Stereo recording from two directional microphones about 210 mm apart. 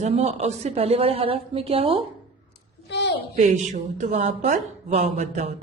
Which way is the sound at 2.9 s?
55° left (ahead or behind).